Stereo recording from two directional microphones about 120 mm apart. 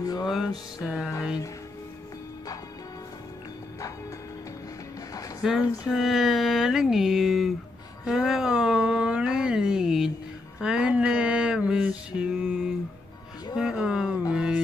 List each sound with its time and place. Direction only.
0.0 s music: 30° left (ahead or behind)
0.8 s speech: 5° right (ahead or behind)
5.4 s speech: 5° right (ahead or behind)
10.6 s a sound: 10° right (ahead or behind)
14.3 s music: 5° right (ahead or behind)